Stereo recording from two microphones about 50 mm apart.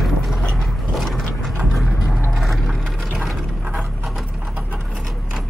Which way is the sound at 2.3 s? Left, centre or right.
Centre.